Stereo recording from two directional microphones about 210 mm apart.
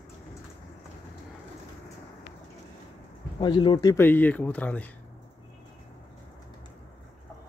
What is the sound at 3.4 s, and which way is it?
Speech, 20° left (ahead or behind).